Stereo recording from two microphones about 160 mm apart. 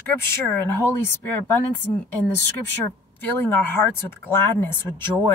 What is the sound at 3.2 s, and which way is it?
Speech, 15° left (ahead or behind).